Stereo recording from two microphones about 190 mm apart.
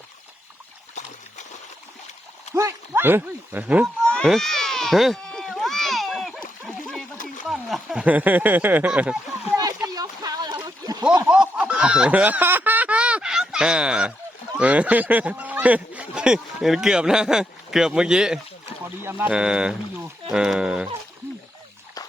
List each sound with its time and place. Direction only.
2.6 s speech: 15° right (ahead or behind)
4.0 s baby cry: 5° left (ahead or behind)
7.4 s speech: centre (ahead or behind)
9.8 s a sound: 20° right (ahead or behind)
11.3 s chicken: 5° right (ahead or behind)
14.6 s speech: 5° right (ahead or behind)